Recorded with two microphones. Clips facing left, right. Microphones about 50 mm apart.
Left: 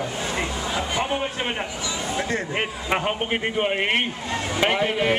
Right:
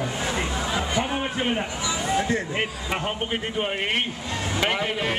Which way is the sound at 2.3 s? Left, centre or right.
Left.